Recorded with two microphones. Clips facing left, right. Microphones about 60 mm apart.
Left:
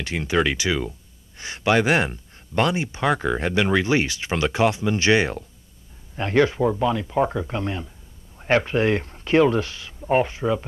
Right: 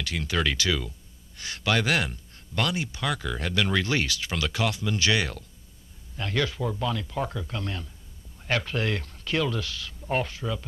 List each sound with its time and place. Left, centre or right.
0.0 s speech: left